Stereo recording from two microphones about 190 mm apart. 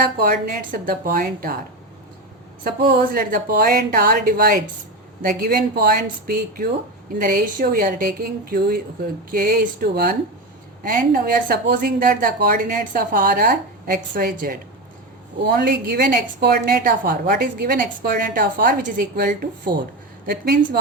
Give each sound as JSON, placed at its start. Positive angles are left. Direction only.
{"t": 0.2, "sound": "a woman's voice", "side_deg": -50}
{"t": 2.6, "sound": "a woman's voice", "side_deg": -50}